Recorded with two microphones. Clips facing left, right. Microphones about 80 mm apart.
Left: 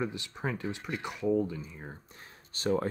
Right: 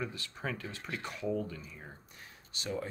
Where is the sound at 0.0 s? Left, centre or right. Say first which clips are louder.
Left 5 dB; left.